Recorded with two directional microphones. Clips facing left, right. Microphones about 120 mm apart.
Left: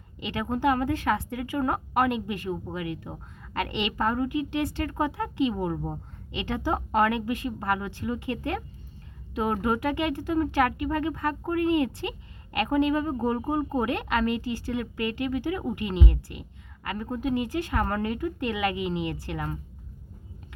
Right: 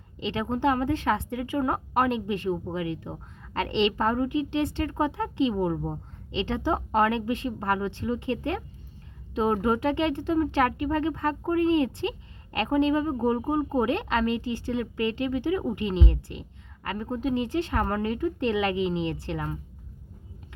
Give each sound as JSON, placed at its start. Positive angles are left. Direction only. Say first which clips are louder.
{"t": 0.2, "sound": "speech", "louder": "right 1 dB", "side_deg": -25}